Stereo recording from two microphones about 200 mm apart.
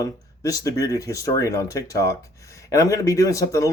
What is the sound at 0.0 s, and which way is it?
Speech, 15° left (ahead or behind).